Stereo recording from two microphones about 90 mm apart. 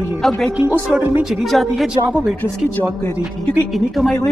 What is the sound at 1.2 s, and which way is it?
Speech, centre (ahead or behind).